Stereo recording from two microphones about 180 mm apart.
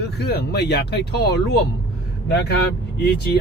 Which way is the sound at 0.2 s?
65° left (ahead or behind).